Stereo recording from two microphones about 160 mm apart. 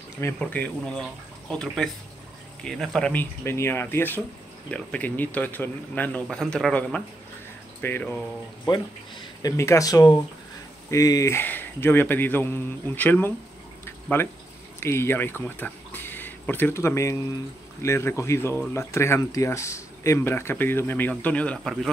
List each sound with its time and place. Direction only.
0.2 s speech: 10° left (ahead or behind)
9.4 s speech: 20° left (ahead or behind)
14.8 s speech: 15° left (ahead or behind)